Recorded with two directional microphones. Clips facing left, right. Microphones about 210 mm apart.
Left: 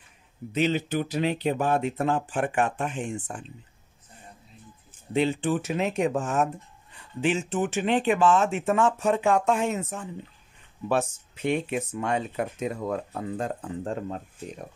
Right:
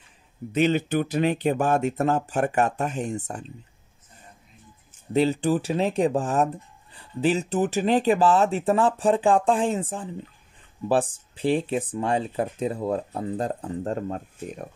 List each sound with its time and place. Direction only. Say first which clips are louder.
0.5 s speech: right 3 dB; 50° right (ahead or behind)
5.1 s speech: right 3 dB; 40° right (ahead or behind)